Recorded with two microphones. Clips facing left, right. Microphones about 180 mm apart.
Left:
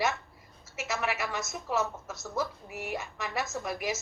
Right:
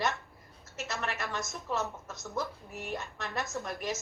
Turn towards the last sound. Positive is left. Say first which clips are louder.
# left 2 dB
turn(degrees=10)  # may be behind; listen again after turning